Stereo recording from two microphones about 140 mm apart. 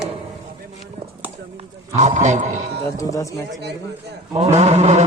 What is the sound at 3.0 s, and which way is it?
Speech, 25° left (ahead or behind).